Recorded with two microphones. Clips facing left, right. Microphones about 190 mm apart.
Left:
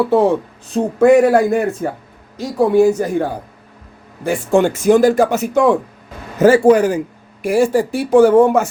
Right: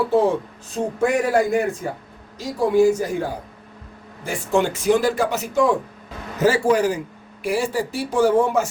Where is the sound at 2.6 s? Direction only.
60° left (ahead or behind).